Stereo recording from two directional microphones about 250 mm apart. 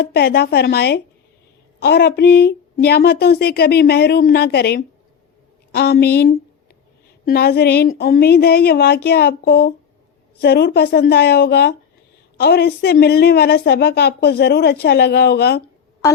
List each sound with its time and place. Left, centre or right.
0.0 s a woman's voice: left